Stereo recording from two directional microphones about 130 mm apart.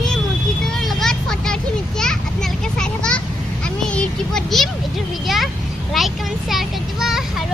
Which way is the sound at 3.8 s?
5° left (ahead or behind).